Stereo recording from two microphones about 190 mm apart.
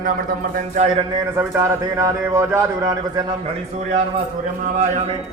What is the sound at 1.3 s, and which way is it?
A man's voice, 15° right (ahead or behind).